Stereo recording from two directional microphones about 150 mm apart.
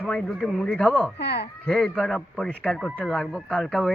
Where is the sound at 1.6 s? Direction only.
5° left (ahead or behind).